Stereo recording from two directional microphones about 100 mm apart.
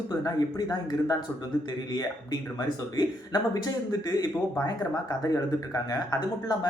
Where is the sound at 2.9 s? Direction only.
40° left (ahead or behind).